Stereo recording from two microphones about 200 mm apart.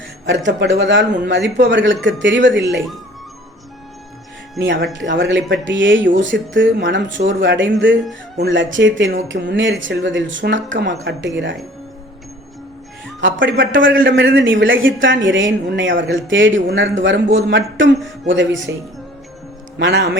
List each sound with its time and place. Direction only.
0.3 s a woman's voice: 65° right (ahead or behind)
4.6 s a woman's voice: 65° right (ahead or behind)
13.2 s a woman's voice: 70° right (ahead or behind)
19.8 s speech: 60° right (ahead or behind)